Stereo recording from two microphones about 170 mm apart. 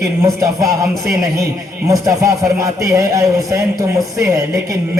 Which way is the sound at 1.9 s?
20° right (ahead or behind).